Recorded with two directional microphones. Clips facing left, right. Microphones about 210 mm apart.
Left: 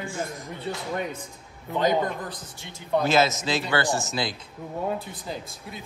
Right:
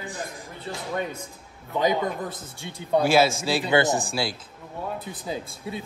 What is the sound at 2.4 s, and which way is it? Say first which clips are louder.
Speech: right 4 dB; 30° right (ahead or behind).